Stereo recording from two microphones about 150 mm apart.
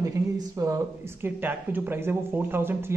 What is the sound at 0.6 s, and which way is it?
Speech, 25° right (ahead or behind).